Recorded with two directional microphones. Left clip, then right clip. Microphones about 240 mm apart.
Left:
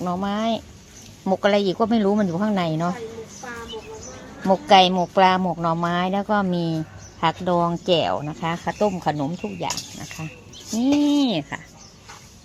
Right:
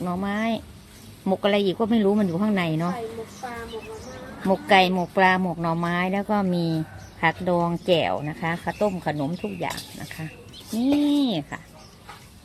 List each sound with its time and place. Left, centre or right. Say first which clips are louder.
0.0 s speech: left 3 dB; centre
4.4 s speech: left 4 dB; centre
11.1 s speech: left 2 dB; centre